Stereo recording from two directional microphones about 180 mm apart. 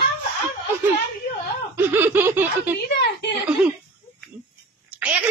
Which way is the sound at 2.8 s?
75° left (ahead or behind).